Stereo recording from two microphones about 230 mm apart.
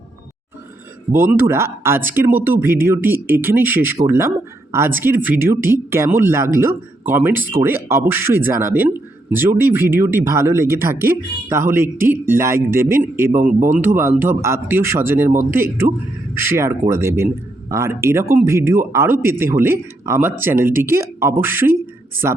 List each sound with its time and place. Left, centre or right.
1.1 s a man's voice: centre